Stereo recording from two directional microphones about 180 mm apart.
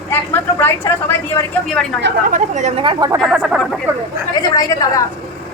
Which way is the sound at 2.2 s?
45° right (ahead or behind).